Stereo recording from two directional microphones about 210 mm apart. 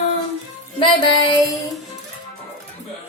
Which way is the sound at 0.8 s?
25° left (ahead or behind).